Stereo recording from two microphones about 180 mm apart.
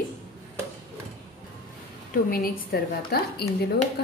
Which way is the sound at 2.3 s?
55° left (ahead or behind).